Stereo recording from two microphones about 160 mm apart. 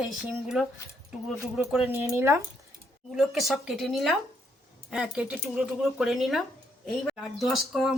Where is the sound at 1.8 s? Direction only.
15° right (ahead or behind).